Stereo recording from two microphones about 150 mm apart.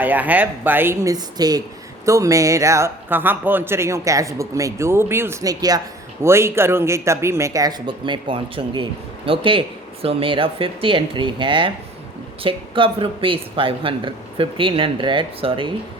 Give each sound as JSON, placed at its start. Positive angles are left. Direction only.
{"t": 0.0, "sound": "a woman's voice", "side_deg": -10}